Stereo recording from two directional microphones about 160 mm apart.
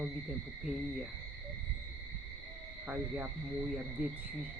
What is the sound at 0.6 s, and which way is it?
Speech, 10° right (ahead or behind).